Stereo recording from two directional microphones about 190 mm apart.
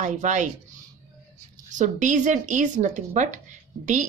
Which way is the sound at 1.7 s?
40° right (ahead or behind).